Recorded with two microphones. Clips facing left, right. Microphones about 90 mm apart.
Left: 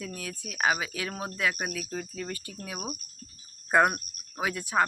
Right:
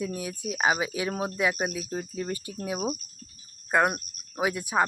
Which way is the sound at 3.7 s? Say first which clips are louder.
Left 1 dB; centre (ahead or behind).